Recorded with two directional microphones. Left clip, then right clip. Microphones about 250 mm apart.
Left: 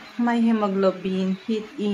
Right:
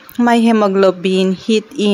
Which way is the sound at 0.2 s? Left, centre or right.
Right.